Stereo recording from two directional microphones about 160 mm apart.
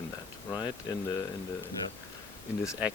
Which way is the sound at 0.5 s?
25° left (ahead or behind).